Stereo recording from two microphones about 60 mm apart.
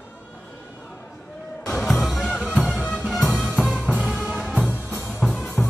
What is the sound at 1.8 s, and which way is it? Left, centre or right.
Music, centre.